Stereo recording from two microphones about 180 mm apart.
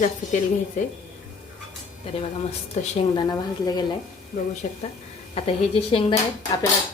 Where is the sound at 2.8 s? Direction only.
40° left (ahead or behind).